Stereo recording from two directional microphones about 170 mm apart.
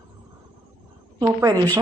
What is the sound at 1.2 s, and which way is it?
Speech, 20° right (ahead or behind).